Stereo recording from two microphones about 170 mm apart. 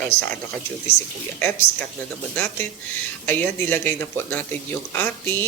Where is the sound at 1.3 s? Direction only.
10° left (ahead or behind).